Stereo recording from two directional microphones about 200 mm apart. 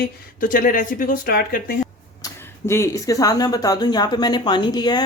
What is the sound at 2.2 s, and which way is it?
Speech, 15° left (ahead or behind).